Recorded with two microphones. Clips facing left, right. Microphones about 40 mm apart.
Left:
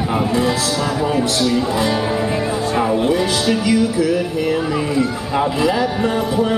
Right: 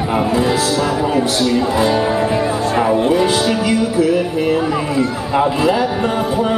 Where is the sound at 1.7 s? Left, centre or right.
Centre.